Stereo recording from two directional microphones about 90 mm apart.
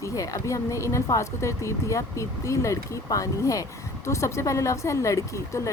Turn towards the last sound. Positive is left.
turn(degrees=35)  # may be behind; listen again after turning